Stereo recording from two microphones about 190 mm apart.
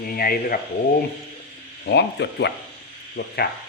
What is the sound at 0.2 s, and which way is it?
Speech, 50° left (ahead or behind).